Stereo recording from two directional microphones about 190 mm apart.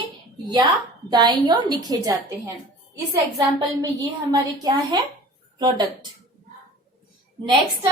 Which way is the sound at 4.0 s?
20° right (ahead or behind).